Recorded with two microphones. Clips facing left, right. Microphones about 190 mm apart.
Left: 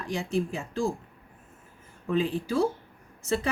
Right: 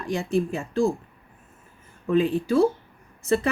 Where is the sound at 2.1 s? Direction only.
60° right (ahead or behind).